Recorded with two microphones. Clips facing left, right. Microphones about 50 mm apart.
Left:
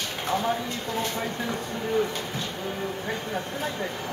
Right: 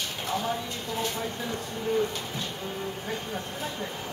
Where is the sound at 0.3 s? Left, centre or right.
Centre.